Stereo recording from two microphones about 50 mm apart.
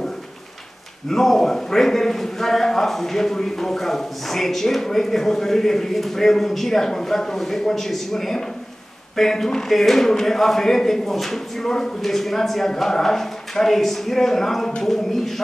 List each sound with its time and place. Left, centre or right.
1.0 s a man's voice: centre